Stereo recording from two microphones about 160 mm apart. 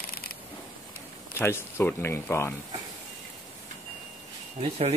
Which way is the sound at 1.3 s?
15° left (ahead or behind).